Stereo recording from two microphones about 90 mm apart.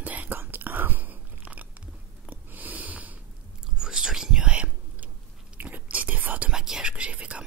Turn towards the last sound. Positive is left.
turn(degrees=-15)  # may be behind; listen again after turning